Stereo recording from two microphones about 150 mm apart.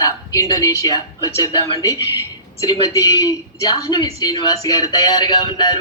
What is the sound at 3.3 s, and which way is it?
Speech, 30° left (ahead or behind).